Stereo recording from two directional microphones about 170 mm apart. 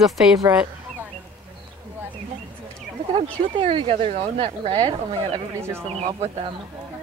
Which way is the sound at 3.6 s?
30° right (ahead or behind).